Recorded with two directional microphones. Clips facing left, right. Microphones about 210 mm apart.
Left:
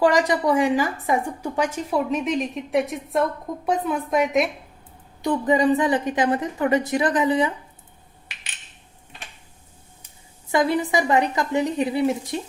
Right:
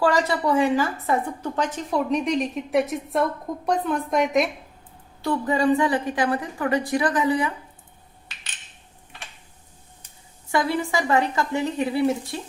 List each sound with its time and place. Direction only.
0.0 s a woman's voice: 15° left (ahead or behind)
5.2 s a woman's voice: 20° left (ahead or behind)
10.5 s a woman's voice: 20° left (ahead or behind)